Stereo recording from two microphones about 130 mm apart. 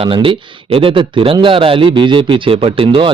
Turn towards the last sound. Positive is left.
turn(degrees=-40)  # may be behind; listen again after turning